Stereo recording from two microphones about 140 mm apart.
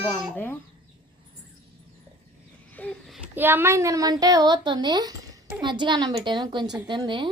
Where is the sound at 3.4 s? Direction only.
15° right (ahead or behind).